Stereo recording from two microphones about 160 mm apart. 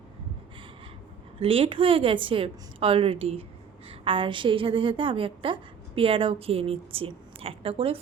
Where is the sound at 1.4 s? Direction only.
35° right (ahead or behind).